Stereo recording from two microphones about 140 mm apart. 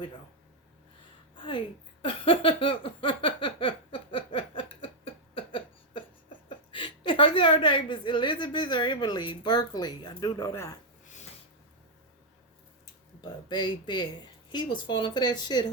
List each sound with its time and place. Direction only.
1.4 s a sound: 35° left (ahead or behind)
6.7 s a woman's voice: 35° left (ahead or behind)
13.5 s a woman's voice: 35° left (ahead or behind)